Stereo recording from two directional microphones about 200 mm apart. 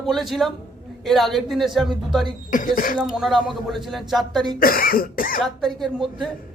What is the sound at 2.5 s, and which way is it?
Cough, 45° left (ahead or behind).